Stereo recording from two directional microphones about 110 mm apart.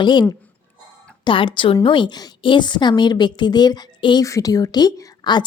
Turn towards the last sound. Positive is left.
turn(degrees=40)  # may be behind; listen again after turning